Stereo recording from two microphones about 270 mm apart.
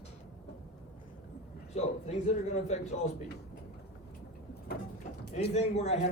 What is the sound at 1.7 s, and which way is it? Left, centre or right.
Speech, left.